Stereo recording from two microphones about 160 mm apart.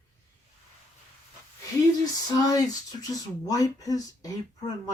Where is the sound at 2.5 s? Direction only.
20° left (ahead or behind).